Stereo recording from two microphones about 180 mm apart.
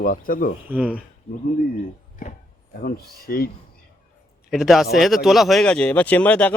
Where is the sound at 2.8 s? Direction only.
55° left (ahead or behind).